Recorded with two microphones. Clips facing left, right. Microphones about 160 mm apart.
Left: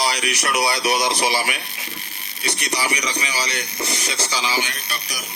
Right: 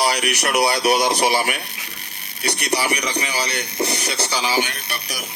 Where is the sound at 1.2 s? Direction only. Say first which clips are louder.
Right 3 dB; 50° right (ahead or behind).